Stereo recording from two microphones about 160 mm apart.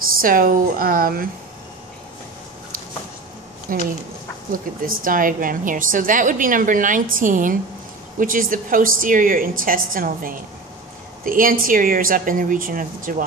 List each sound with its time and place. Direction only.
0.2 s a woman's voice: 60° right (ahead or behind)
3.7 s a woman's voice: 60° right (ahead or behind)